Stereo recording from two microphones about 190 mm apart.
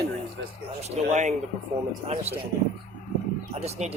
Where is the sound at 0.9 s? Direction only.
40° right (ahead or behind).